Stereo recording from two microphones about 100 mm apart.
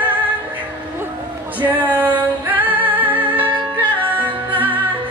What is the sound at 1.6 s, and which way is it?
Music, 15° right (ahead or behind).